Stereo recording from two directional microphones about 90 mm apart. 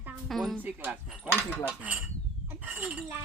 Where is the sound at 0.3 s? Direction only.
Centre (ahead or behind).